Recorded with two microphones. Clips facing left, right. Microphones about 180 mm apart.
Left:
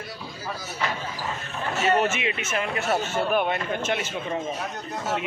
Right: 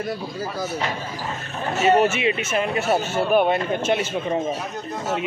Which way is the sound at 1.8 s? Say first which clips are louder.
Right 5 dB; 25° right (ahead or behind).